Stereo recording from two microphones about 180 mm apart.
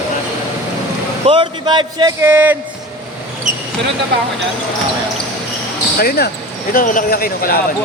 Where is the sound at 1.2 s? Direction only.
25° right (ahead or behind).